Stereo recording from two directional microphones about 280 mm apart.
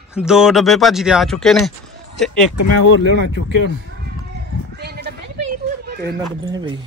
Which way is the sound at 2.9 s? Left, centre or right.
Left.